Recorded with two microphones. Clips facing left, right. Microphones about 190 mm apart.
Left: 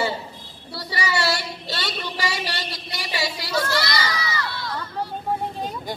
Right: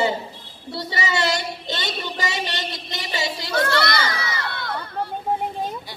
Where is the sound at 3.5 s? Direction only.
60° right (ahead or behind).